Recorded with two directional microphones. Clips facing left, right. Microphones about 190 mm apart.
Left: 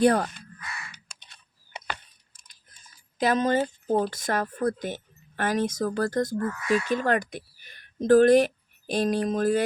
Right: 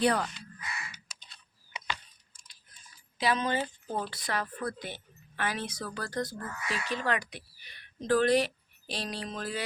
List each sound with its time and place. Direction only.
0.0 s speech: 50° left (ahead or behind)
1.2 s a sound: 55° left (ahead or behind)
3.2 s speech: 45° left (ahead or behind)